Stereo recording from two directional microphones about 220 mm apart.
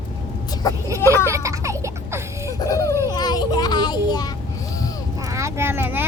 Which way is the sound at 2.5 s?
15° left (ahead or behind).